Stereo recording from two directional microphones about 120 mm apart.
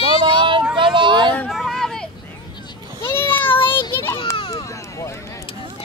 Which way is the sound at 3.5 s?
45° left (ahead or behind).